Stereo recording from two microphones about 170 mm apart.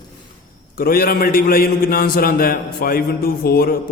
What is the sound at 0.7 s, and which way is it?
A man's voice, 60° left (ahead or behind).